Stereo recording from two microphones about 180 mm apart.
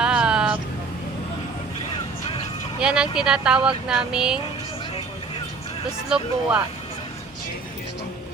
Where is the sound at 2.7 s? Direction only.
5° right (ahead or behind).